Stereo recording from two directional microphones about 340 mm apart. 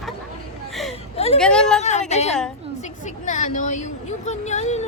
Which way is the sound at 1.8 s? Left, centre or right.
Centre.